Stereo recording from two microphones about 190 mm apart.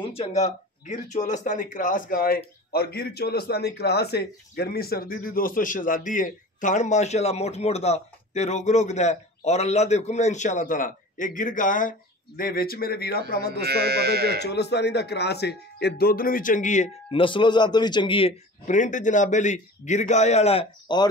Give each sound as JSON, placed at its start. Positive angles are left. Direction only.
{"t": 0.0, "sound": "a sound", "side_deg": 30}
{"t": 0.4, "sound": "speech", "side_deg": 35}
{"t": 13.7, "sound": "speech", "side_deg": -55}
{"t": 14.4, "sound": "speech", "side_deg": 65}
{"t": 18.7, "sound": "a man's voice", "side_deg": 40}